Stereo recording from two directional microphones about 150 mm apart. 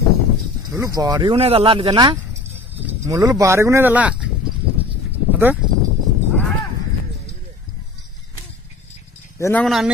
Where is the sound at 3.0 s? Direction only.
20° right (ahead or behind).